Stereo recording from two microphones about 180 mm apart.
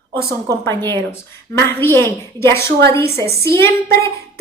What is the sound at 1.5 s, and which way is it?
Speech, 15° left (ahead or behind).